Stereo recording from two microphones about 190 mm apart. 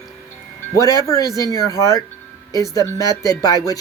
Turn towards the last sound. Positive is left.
turn(degrees=20)  # may be behind; listen again after turning